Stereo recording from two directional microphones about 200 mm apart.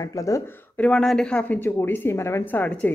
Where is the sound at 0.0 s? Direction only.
15° left (ahead or behind).